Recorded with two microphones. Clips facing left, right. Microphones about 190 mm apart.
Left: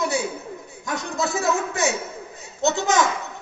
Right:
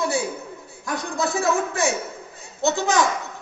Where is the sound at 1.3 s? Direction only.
20° left (ahead or behind).